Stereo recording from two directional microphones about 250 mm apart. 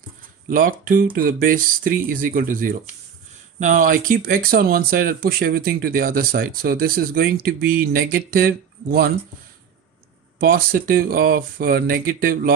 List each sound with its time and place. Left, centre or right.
0.9 s speech: right
10.4 s speech: right